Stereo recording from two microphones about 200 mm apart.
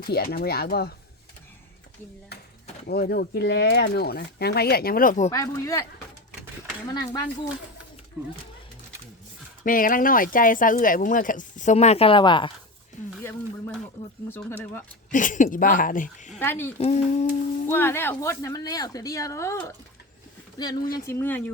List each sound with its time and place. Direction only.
0.0 s speech: 50° left (ahead or behind)
2.8 s speech: 50° left (ahead or behind)
5.3 s speech: 15° left (ahead or behind)
9.6 s speech: 45° left (ahead or behind); by 12.5 s 25° left (ahead or behind)
14.3 s speech: 10° left (ahead or behind)
15.1 s speech: 40° left (ahead or behind)
16.4 s speech: 10° left (ahead or behind)
16.7 s speech: 35° left (ahead or behind)
17.7 s speech: 10° left (ahead or behind)
20.8 s speech: 45° left (ahead or behind)
21.1 s speech: 10° left (ahead or behind)